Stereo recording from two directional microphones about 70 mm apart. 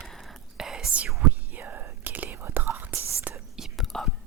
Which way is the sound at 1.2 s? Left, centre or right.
Right.